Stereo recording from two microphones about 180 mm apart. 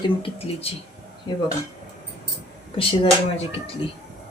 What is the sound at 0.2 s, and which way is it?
Speech, 30° left (ahead or behind).